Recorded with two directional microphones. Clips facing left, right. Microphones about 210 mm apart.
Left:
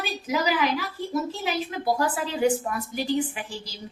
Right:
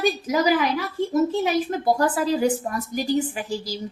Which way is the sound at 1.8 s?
45° right (ahead or behind).